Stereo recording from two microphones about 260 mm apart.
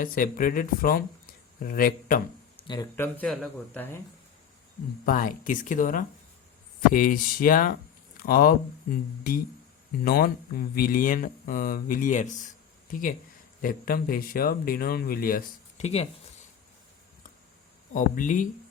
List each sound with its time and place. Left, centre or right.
0.0 s speech: left
2.6 s speech: centre
5.0 s speech: left
10.0 s speech: left
17.9 s speech: left